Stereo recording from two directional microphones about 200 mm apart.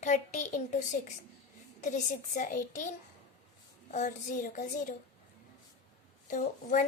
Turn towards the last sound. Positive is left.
turn(degrees=40)  # may be behind; listen again after turning